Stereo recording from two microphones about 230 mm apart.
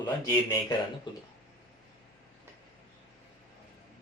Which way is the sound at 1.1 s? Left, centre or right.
Left.